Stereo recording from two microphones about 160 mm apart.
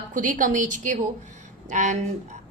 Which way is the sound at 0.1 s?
55° right (ahead or behind).